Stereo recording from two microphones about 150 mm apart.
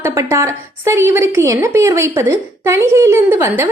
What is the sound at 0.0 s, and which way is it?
A woman's voice, 20° right (ahead or behind).